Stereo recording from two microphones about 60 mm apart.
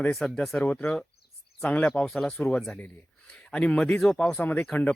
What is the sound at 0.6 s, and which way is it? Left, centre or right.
Speech, left.